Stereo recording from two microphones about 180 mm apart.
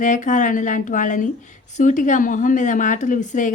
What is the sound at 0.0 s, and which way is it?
Speech, 45° left (ahead or behind).